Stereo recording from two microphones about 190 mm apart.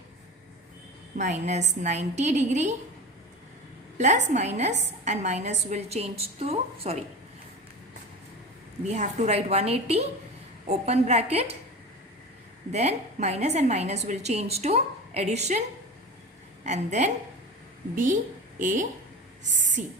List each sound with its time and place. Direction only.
1.1 s a woman's voice: 40° right (ahead or behind)
3.9 s a woman's voice: 35° right (ahead or behind)
8.9 s a woman's voice: 35° right (ahead or behind)
12.7 s a woman's voice: 35° right (ahead or behind)
16.6 s a woman's voice: 35° right (ahead or behind)